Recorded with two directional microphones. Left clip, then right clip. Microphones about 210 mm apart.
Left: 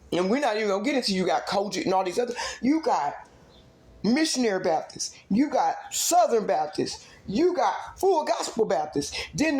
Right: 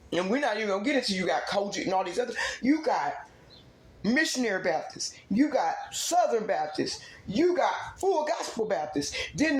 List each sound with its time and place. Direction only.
0.1 s speech: 40° left (ahead or behind)
4.0 s speech: 40° left (ahead or behind)